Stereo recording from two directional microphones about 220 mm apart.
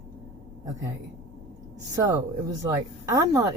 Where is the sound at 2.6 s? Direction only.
15° right (ahead or behind).